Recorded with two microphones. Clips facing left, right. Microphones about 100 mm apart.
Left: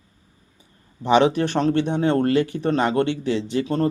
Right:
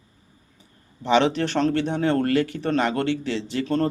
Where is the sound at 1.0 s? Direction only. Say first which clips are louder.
Left 3 dB; 15° left (ahead or behind).